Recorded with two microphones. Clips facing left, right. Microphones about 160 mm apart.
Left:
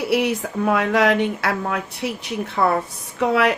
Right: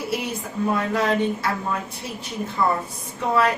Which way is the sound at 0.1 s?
70° left (ahead or behind).